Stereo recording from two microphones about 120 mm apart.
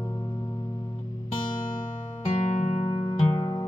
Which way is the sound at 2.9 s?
45° left (ahead or behind).